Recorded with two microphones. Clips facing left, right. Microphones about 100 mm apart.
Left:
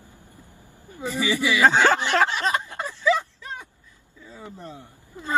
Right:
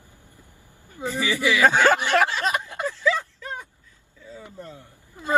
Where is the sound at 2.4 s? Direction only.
15° right (ahead or behind).